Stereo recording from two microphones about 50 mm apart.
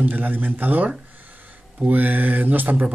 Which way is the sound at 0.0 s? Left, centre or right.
Right.